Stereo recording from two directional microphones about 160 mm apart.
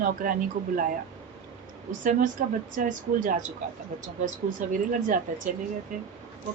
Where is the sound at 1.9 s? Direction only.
55° right (ahead or behind).